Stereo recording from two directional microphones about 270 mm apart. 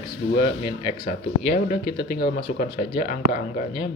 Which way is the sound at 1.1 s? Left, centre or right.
Left.